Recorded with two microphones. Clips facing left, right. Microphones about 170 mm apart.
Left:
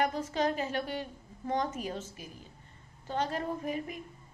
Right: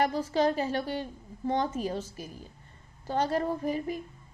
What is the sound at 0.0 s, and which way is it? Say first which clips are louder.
A woman's voice: right 4 dB; 35° right (ahead or behind).